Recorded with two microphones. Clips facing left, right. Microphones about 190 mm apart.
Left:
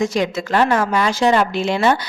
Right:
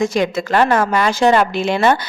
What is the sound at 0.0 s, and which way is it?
Speech, 50° right (ahead or behind).